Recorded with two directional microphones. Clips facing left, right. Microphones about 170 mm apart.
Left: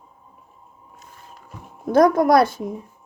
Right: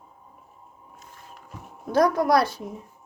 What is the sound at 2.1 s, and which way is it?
Speech, 50° left (ahead or behind).